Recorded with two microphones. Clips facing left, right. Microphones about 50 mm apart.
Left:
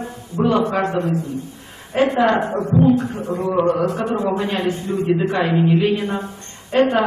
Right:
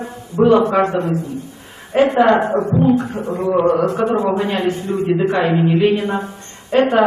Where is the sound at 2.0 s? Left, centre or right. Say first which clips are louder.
Right 3 dB; centre.